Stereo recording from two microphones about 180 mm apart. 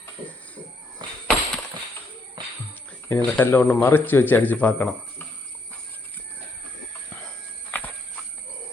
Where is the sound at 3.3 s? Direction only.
10° left (ahead or behind).